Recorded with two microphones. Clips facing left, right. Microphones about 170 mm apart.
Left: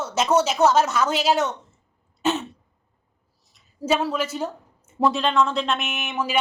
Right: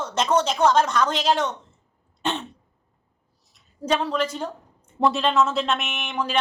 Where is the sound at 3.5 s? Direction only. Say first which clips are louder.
Left 1 dB; 5° left (ahead or behind).